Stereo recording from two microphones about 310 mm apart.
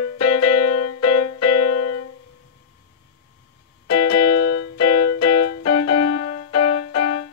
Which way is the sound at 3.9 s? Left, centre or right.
Left.